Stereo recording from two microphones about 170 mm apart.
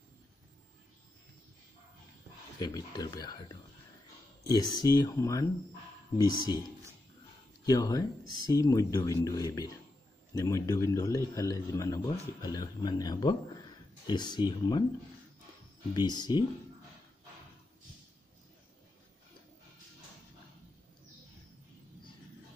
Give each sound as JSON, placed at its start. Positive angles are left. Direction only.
{"t": 2.6, "sound": "a man's voice", "side_deg": 20}
{"t": 4.5, "sound": "a man's voice", "side_deg": 20}
{"t": 7.6, "sound": "a man's voice", "side_deg": 20}
{"t": 15.9, "sound": "a man's voice", "side_deg": 25}